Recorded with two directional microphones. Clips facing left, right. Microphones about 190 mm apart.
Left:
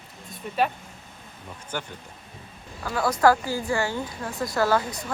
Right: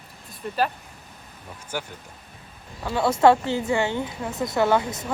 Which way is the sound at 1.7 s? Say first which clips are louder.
Right 1 dB; 10° right (ahead or behind).